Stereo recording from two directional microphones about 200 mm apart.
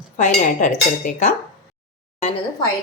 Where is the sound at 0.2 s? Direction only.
40° left (ahead or behind).